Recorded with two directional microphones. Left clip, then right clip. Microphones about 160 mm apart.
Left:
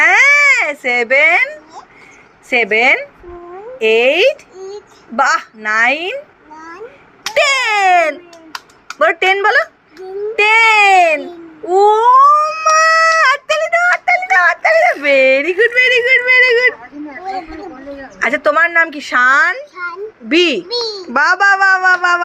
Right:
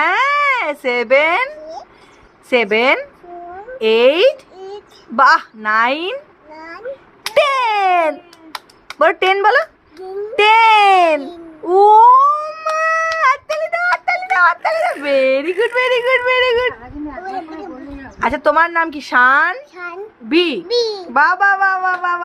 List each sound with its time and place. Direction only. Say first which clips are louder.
0.0 s baby cry: left 6 dB; 5° right (ahead or behind)
0.5 s a woman's voice: left 4 dB; 20° right (ahead or behind)
7.3 s baby cry: left 1 dB; 20° right (ahead or behind)
7.5 s a sound: left 3 dB; 10° right (ahead or behind)
9.0 s a woman's voice: left 1 dB; 25° right (ahead or behind)
11.9 s a sound: left 2 dB; 5° right (ahead or behind); by 16.7 s 30° right (ahead or behind)
18.2 s a woman's voice: left 1 dB; 15° right (ahead or behind)
20.2 s a child's voice: left 3 dB; centre (ahead or behind)
21.1 s a woman's voice: left 2 dB; 15° left (ahead or behind)